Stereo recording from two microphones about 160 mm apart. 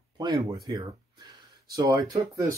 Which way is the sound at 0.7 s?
25° right (ahead or behind).